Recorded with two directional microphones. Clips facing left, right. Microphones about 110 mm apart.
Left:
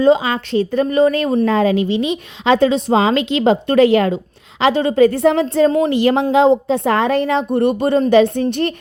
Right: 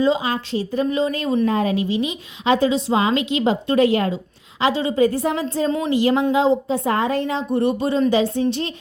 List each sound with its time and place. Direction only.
0.0 s speech: 70° left (ahead or behind)
1.5 s a woman's voice: 90° left
4.6 s a woman's voice: 55° left (ahead or behind)